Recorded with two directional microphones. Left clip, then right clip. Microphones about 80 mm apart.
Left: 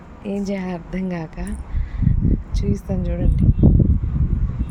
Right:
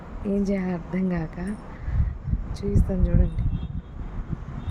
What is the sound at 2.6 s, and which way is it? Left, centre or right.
Speech, centre.